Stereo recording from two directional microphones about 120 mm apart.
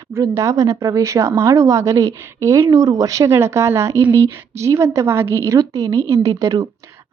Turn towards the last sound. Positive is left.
turn(degrees=-30)  # may be behind; listen again after turning